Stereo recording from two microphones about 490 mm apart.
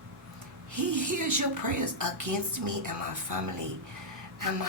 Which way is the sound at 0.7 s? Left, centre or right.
Right.